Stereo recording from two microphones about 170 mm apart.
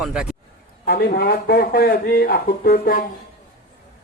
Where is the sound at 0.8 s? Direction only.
60° left (ahead or behind).